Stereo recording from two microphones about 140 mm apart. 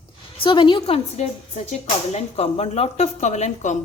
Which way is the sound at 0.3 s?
35° left (ahead or behind).